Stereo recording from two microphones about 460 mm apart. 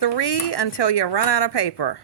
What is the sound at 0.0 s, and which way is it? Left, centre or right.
Speech, left.